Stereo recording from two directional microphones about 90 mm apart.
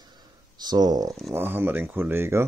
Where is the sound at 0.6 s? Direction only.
50° right (ahead or behind).